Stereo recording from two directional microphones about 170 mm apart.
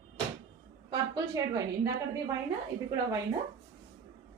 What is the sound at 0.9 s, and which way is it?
A woman's voice, 20° right (ahead or behind).